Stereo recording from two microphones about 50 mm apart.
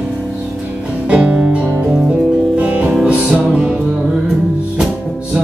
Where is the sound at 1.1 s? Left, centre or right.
Right.